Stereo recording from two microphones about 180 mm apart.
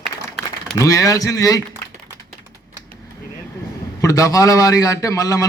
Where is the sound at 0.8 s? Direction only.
20° left (ahead or behind).